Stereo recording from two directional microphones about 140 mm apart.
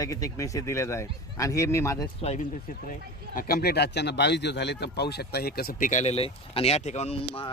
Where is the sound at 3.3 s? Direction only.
90° left.